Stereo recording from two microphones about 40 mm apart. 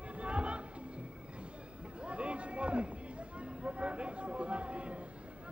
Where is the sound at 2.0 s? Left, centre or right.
Right.